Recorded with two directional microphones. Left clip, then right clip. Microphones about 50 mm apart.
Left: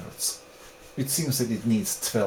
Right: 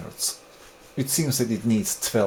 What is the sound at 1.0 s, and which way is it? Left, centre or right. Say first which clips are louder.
Speech: right 3 dB; right.